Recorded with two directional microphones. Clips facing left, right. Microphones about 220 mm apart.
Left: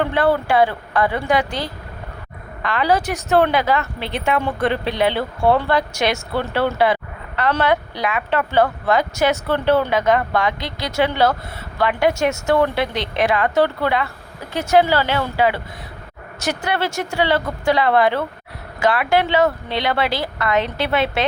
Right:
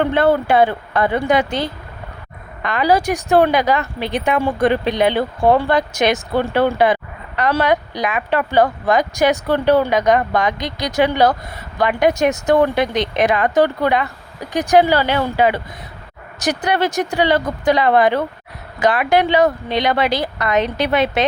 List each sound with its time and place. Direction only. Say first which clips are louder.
0.0 s a woman's voice: right 3 dB; 25° right (ahead or behind)